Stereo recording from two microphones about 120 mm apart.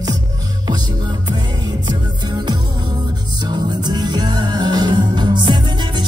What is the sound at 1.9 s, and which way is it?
Music, 35° right (ahead or behind).